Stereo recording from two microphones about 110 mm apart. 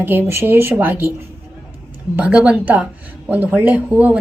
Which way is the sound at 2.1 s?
15° right (ahead or behind).